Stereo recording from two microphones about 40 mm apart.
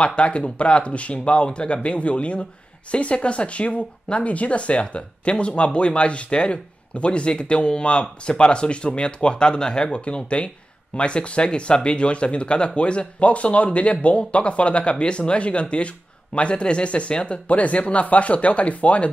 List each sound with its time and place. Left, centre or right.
0.0 s speech: left